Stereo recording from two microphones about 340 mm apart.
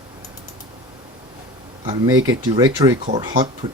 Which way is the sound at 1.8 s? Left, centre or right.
Centre.